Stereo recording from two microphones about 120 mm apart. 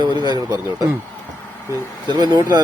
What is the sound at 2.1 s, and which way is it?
Speech, 35° right (ahead or behind).